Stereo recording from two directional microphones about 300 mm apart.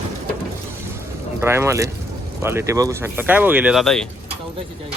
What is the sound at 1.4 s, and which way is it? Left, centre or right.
Speech, centre.